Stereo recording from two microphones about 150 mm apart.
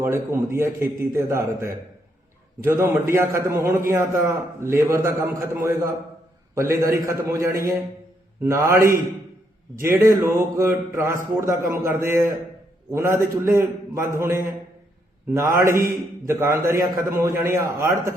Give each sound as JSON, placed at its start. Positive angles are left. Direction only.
{"t": 0.0, "sound": "a man's voice", "side_deg": -15}
{"t": 10.3, "sound": "a man's voice", "side_deg": -15}